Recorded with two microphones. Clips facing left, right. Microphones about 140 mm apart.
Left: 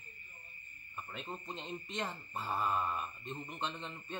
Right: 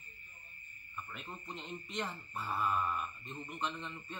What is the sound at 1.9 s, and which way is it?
Speech, 40° left (ahead or behind).